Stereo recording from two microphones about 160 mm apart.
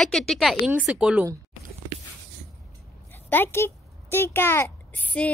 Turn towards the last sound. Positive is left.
turn(degrees=10)  # may be behind; listen again after turning